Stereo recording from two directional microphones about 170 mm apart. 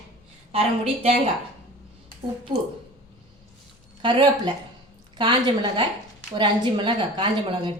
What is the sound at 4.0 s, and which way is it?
A woman's voice, 30° right (ahead or behind).